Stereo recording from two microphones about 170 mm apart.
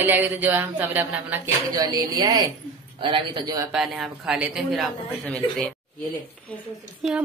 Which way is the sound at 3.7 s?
Centre (ahead or behind).